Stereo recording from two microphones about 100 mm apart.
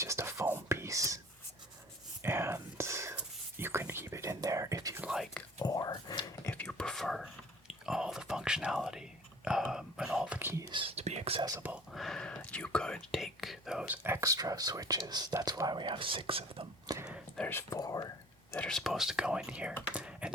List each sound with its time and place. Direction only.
0.0 s whispering: 30° right (ahead or behind)
2.2 s whispering: 25° right (ahead or behind)
5.5 s whispering: 40° left (ahead or behind)
6.5 s whispering: 10° left (ahead or behind); by 10.5 s 15° right (ahead or behind)
10.7 s whispering: 65° right (ahead or behind); by 11.4 s 85° right
11.9 s whispering: 5° left (ahead or behind)
13.8 s whispering: 20° right (ahead or behind)
14.3 s whispering: 35° right (ahead or behind); by 16.6 s 65° right (ahead or behind)
16.9 s whispering: 40° right (ahead or behind)
17.5 s speech: 30° left (ahead or behind)
17.7 s whispering: 40° left (ahead or behind)
18.5 s whispering: 10° left (ahead or behind); by 20.3 s 10° right (ahead or behind)